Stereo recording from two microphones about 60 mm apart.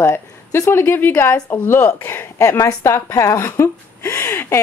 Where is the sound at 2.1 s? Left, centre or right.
Left.